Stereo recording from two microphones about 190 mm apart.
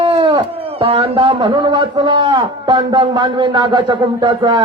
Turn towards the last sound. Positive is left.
turn(degrees=-25)  # may be behind; listen again after turning